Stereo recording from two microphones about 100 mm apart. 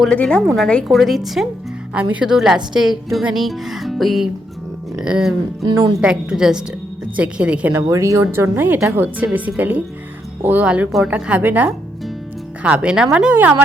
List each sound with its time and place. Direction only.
0.1 s speech: 10° left (ahead or behind)
1.9 s speech: 10° right (ahead or behind)
7.7 s speech: 30° right (ahead or behind)